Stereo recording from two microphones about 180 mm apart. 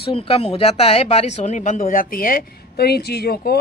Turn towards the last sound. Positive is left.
turn(degrees=60)  # may be behind; listen again after turning